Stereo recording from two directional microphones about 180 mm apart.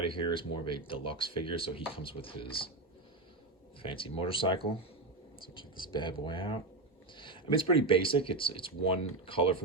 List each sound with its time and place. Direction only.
0.1 s speech: 30° left (ahead or behind)
3.8 s speech: 30° left (ahead or behind)